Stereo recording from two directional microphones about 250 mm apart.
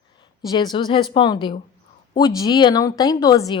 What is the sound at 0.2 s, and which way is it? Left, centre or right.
A woman's voice, centre.